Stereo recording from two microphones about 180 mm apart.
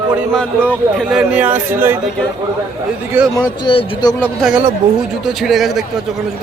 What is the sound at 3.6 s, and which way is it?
Speech, 25° left (ahead or behind).